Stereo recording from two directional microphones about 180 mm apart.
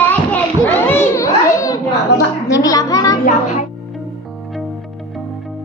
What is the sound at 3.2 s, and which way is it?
Music, 40° left (ahead or behind).